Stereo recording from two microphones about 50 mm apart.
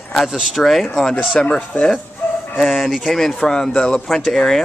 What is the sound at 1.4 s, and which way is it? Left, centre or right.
Speech, centre.